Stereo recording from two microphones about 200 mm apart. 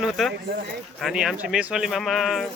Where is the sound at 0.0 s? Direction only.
Centre (ahead or behind).